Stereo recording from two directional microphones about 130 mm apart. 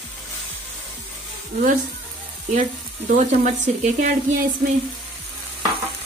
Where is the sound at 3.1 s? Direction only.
65° right (ahead or behind).